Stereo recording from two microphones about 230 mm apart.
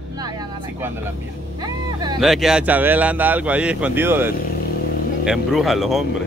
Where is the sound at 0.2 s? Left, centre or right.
Centre.